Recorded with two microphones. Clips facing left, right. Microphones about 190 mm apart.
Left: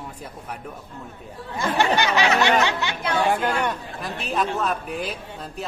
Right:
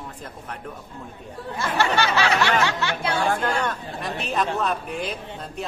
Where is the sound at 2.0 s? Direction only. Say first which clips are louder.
Left 1 dB; 15° left (ahead or behind).